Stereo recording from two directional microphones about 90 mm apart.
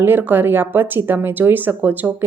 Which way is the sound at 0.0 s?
20° right (ahead or behind).